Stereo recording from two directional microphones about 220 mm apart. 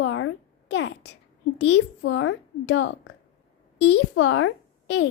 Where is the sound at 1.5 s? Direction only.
55° left (ahead or behind).